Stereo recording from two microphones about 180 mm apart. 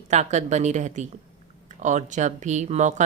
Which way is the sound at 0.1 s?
40° right (ahead or behind).